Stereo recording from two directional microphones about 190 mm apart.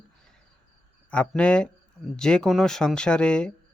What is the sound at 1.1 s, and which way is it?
Speech, 5° left (ahead or behind).